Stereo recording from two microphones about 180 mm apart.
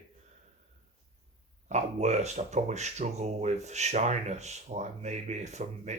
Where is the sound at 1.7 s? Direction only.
40° right (ahead or behind).